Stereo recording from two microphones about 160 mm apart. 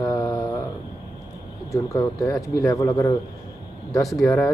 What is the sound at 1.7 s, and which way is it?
Speech, 20° left (ahead or behind).